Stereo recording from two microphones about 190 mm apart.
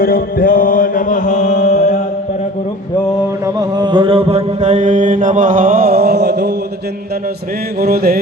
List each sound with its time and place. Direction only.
0.0 s mantra: 50° left (ahead or behind)
3.4 s mantra: 20° right (ahead or behind); by 6.5 s 60° right (ahead or behind)
7.8 s music: 55° right (ahead or behind)